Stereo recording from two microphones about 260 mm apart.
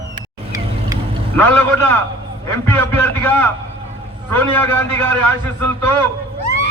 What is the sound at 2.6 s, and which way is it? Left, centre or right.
A man's voice, centre.